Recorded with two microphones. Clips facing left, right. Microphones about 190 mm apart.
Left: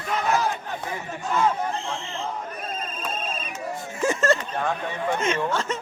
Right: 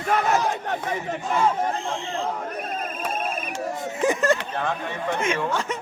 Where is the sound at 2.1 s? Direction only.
65° right (ahead or behind).